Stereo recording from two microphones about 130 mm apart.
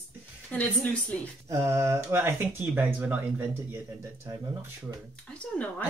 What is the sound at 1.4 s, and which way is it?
Speech, 20° right (ahead or behind).